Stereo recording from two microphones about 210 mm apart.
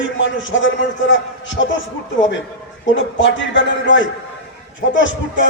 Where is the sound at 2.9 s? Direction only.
60° left (ahead or behind).